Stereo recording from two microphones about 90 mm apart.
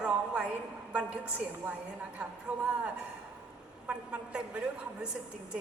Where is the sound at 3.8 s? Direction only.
10° right (ahead or behind).